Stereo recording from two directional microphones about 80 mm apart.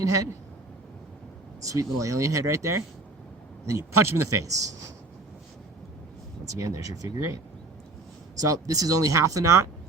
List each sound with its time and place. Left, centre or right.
0.0 s speech: right
1.6 s speech: right
6.4 s speech: right
8.4 s speech: right